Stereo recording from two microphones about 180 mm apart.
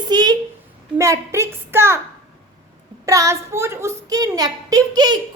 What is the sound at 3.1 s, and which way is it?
A woman's voice, 15° right (ahead or behind).